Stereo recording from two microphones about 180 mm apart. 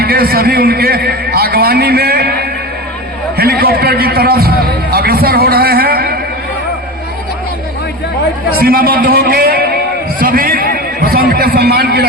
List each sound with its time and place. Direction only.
0.0 s a man's voice: 60° right (ahead or behind)
8.5 s a man's voice: 55° right (ahead or behind)
10.2 s a sound: 55° right (ahead or behind)